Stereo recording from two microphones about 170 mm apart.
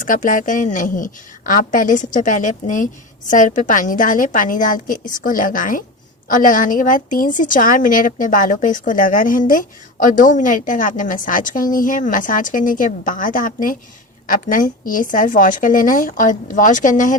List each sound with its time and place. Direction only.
0.0 s a woman's voice: 50° left (ahead or behind)